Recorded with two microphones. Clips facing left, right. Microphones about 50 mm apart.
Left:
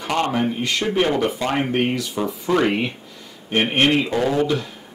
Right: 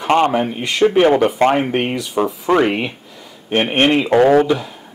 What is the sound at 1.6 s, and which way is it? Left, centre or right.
Speech, centre.